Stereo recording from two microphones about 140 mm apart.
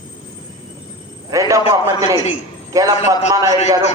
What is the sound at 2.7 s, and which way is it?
Speech, 25° right (ahead or behind).